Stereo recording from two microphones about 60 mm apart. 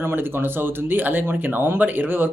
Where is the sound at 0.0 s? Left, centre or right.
Right.